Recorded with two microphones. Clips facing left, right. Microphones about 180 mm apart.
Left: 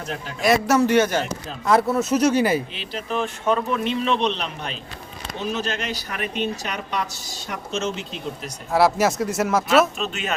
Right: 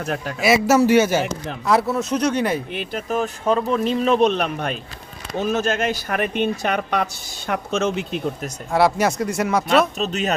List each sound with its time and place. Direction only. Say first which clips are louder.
0.0 s a man's voice: right 5 dB; 55° right (ahead or behind)
0.4 s a man's voice: right 2 dB; 5° right (ahead or behind)
2.7 s speech: right 3 dB; 45° right (ahead or behind)
8.7 s speech: even; centre (ahead or behind)
10.0 s speech: right 5 dB; 40° right (ahead or behind)